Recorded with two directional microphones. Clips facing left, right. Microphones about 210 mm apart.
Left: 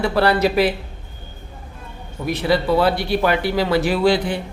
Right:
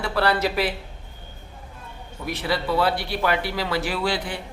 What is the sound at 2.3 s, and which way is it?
Speech, 20° left (ahead or behind).